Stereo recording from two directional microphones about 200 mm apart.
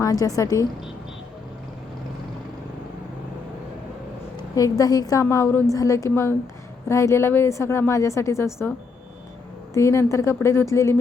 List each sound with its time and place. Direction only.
0.0 s a woman's voice: 15° left (ahead or behind)
4.4 s a woman's voice: 20° left (ahead or behind)
9.7 s a woman's voice: 15° left (ahead or behind)